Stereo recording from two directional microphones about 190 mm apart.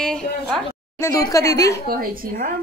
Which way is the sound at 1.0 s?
20° left (ahead or behind).